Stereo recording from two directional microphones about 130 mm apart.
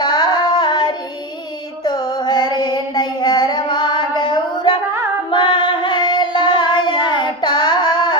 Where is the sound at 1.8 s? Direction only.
30° left (ahead or behind).